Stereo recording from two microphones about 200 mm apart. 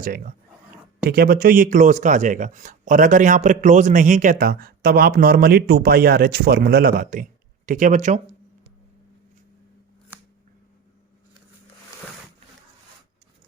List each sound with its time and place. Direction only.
1.0 s speech: 50° right (ahead or behind)